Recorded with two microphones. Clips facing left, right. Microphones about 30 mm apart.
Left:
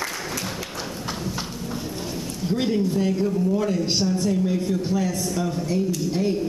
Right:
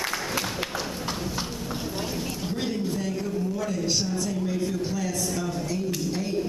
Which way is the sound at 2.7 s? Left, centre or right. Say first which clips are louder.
Left 7 dB; centre.